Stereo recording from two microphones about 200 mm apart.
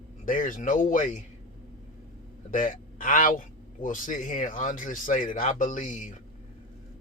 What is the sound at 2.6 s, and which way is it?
Speech, 40° left (ahead or behind).